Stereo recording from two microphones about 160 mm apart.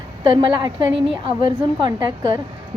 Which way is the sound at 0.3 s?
25° right (ahead or behind).